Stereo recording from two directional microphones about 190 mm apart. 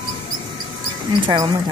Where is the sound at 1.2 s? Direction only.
25° right (ahead or behind).